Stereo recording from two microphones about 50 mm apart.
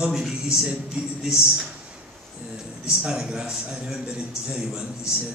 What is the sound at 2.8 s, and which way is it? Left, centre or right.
Speech, centre.